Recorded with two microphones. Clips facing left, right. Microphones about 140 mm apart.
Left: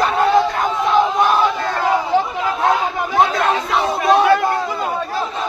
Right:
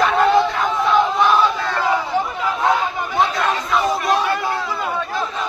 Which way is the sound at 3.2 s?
60° left (ahead or behind).